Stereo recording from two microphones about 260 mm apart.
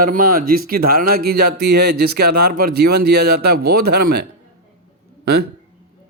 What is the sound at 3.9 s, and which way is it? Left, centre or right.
Speech, right.